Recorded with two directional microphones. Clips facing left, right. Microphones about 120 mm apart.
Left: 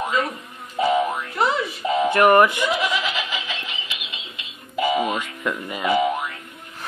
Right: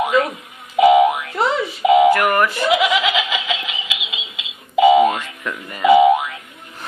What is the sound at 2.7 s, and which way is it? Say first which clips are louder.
Laughter: right 7 dB; 90° right.